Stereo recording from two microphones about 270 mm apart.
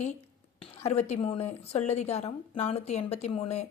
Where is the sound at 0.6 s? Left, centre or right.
Left.